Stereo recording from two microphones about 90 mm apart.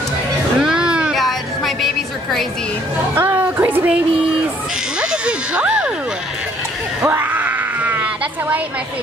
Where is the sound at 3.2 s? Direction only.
20° right (ahead or behind).